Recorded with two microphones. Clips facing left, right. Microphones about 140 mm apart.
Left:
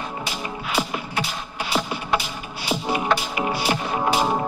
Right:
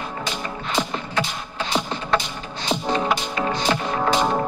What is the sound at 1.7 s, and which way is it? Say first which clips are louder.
Music: right 1 dB; 10° left (ahead or behind).